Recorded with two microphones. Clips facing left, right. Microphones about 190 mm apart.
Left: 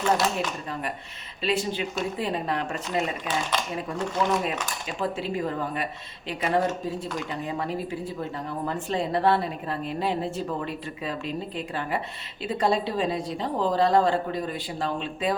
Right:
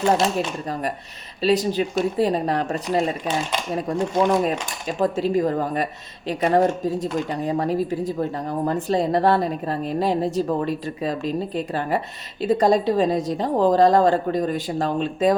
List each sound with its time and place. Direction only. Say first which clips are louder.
0.3 s speech: right 5 dB; 40° right (ahead or behind)